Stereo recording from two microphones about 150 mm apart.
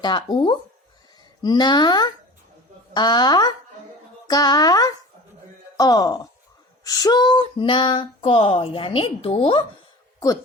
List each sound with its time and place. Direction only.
0.0 s female singing: 30° left (ahead or behind)
1.4 s speech: 30° left (ahead or behind)
6.8 s female singing: 25° left (ahead or behind)